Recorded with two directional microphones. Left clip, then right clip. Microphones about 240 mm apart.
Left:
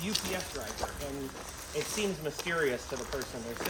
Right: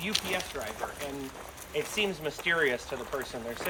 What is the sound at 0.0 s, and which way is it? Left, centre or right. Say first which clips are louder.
Speech: right 3 dB; centre.